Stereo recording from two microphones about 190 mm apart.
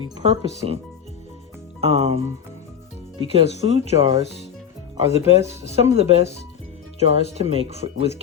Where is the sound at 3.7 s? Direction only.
30° right (ahead or behind).